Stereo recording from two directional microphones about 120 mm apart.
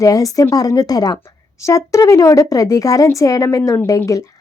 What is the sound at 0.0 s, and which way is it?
A woman's voice, 30° left (ahead or behind).